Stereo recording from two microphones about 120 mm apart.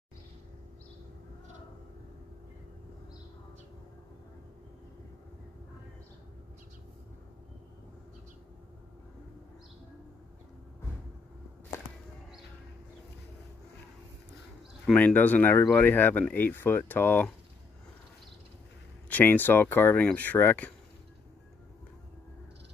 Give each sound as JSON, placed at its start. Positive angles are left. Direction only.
{"t": 14.9, "sound": "speech", "side_deg": 10}
{"t": 19.0, "sound": "speech", "side_deg": 15}